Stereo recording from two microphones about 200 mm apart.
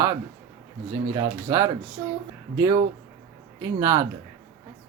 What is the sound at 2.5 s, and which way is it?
Speech, 15° right (ahead or behind).